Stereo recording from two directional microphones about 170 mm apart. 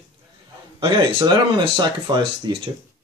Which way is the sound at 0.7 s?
25° right (ahead or behind).